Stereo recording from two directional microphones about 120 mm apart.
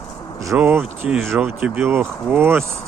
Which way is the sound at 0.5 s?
10° right (ahead or behind).